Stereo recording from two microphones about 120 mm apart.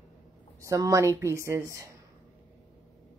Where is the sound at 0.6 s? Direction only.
25° right (ahead or behind).